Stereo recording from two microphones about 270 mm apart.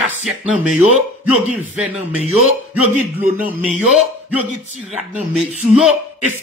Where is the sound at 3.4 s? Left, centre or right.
Centre.